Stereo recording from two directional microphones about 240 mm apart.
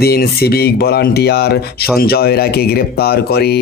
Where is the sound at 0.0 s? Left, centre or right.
Left.